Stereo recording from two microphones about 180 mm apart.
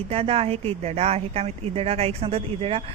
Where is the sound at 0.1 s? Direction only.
35° right (ahead or behind).